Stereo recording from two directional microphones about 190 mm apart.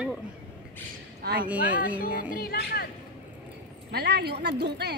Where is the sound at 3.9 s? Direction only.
60° right (ahead or behind).